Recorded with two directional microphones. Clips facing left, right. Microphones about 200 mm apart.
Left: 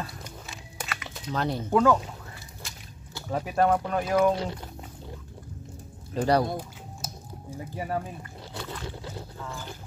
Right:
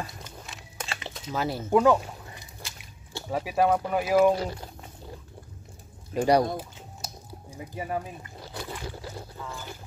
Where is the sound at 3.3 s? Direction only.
5° right (ahead or behind).